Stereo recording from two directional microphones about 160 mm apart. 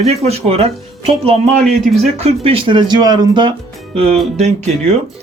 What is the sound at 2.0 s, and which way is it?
Speech, 40° right (ahead or behind).